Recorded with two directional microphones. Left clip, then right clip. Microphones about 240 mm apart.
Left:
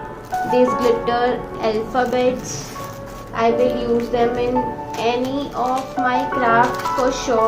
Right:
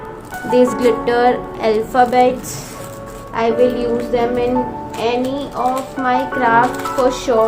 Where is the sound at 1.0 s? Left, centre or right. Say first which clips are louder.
Right 5 dB; right.